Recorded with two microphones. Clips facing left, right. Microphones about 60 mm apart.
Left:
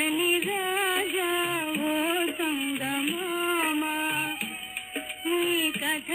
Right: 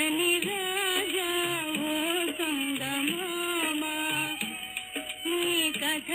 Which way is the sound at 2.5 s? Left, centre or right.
Centre.